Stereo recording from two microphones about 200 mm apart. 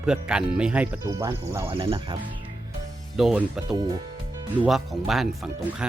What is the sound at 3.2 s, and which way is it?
Speech, 5° right (ahead or behind).